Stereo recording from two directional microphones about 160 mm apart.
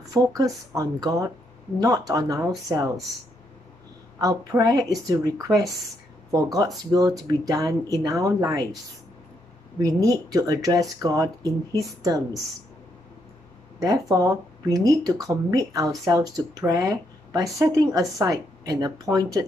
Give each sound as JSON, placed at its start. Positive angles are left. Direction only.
{"t": 0.4, "sound": "speech", "side_deg": -20}
{"t": 4.2, "sound": "speech", "side_deg": -20}
{"t": 9.8, "sound": "speech", "side_deg": -20}
{"t": 14.1, "sound": "speech", "side_deg": -20}